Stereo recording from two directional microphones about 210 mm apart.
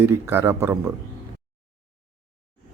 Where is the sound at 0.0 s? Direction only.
10° right (ahead or behind).